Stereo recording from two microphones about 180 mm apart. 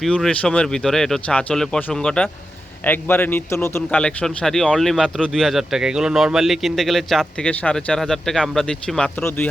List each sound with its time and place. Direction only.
0.0 s a man's voice: 5° left (ahead or behind)